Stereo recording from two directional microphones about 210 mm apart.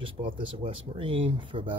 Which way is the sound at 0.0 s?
25° right (ahead or behind).